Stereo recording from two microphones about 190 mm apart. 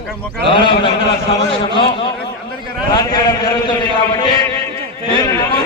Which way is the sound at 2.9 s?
20° left (ahead or behind).